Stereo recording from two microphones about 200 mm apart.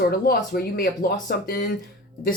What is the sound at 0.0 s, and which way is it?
Speech, 50° left (ahead or behind).